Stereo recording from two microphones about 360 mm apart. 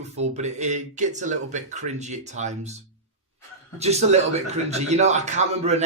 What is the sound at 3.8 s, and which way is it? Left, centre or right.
A man's voice, centre.